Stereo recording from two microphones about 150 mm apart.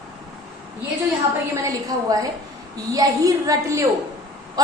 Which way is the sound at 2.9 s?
20° right (ahead or behind).